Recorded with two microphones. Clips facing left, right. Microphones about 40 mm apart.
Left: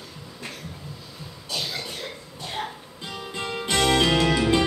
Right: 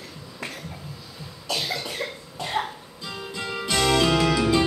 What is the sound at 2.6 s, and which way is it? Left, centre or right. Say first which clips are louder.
Music: right 4 dB; right.